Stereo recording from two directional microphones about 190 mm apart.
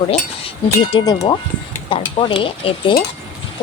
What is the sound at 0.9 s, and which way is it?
Speech, 25° left (ahead or behind).